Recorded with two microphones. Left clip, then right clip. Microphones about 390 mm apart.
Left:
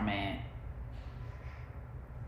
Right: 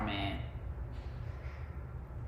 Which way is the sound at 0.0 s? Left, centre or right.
Centre.